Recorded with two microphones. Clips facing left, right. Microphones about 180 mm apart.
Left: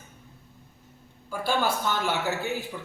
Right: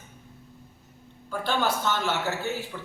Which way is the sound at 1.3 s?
10° left (ahead or behind).